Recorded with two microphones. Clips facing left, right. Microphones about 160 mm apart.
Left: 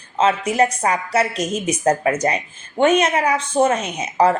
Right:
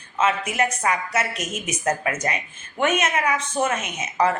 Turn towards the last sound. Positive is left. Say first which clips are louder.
# left 5 dB
turn(degrees=30)  # may be behind; listen again after turning